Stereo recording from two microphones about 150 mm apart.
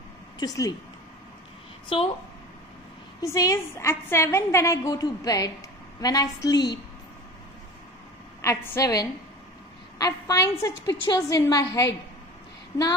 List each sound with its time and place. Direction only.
0.4 s a woman's voice: 25° left (ahead or behind)
3.2 s a woman's voice: 20° left (ahead or behind)
8.4 s a woman's voice: 20° left (ahead or behind)